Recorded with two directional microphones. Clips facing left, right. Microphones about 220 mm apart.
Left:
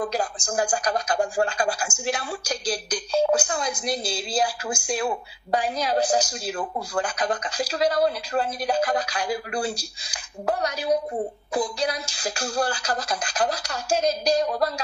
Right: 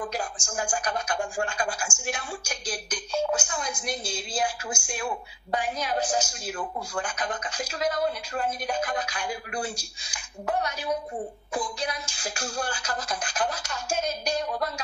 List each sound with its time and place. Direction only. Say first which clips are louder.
0.0 s speech: left 6 dB; 35° left (ahead or behind)
11.9 s speech: left 5 dB; 35° left (ahead or behind)